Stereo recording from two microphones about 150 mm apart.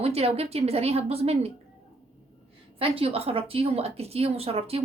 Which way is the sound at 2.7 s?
40° right (ahead or behind).